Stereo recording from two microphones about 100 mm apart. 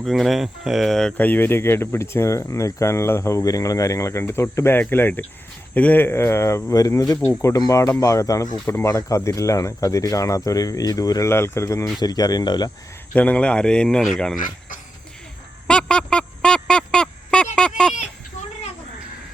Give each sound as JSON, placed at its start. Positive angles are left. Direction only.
{"t": 0.0, "sound": "speech", "side_deg": 0}
{"t": 1.1, "sound": "speech", "side_deg": 15}
{"t": 11.9, "sound": "speech", "side_deg": 40}
{"t": 13.1, "sound": "speech", "side_deg": 15}
{"t": 15.6, "sound": "a sound", "side_deg": 10}